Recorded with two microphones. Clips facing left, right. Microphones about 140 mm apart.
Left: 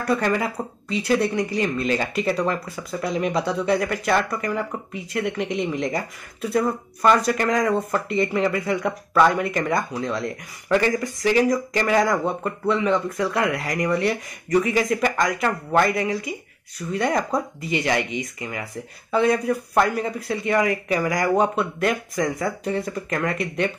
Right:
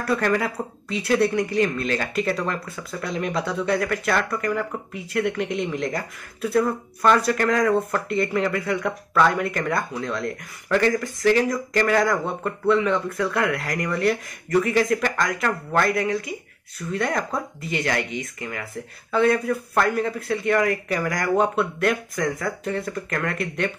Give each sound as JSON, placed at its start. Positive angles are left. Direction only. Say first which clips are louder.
{"t": 0.0, "sound": "speech", "louder": "even", "side_deg": 0}